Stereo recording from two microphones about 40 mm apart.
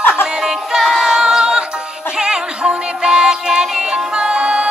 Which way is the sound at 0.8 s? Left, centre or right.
Centre.